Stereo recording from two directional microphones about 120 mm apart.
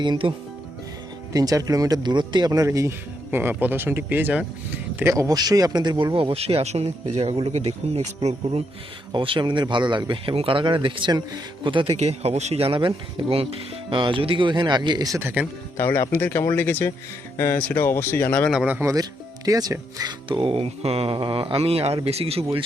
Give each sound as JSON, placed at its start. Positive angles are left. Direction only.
{"t": 0.0, "sound": "speech", "side_deg": -40}
{"t": 1.3, "sound": "speech", "side_deg": -30}
{"t": 6.1, "sound": "speech", "side_deg": -55}
{"t": 9.1, "sound": "speech", "side_deg": -45}
{"t": 11.9, "sound": "speech", "side_deg": -65}
{"t": 15.2, "sound": "speech", "side_deg": -20}
{"t": 15.8, "sound": "speech", "side_deg": 20}
{"t": 18.5, "sound": "speech", "side_deg": -5}
{"t": 18.8, "sound": "speech", "side_deg": -25}
{"t": 20.2, "sound": "speech", "side_deg": -45}